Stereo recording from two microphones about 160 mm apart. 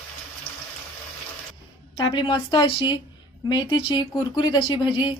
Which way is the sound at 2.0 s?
30° left (ahead or behind).